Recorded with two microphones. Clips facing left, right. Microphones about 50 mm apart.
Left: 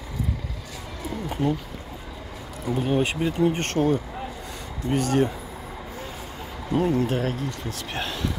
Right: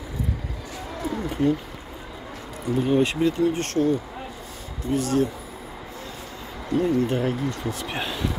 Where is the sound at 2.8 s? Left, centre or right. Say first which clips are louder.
Right 3 dB; centre.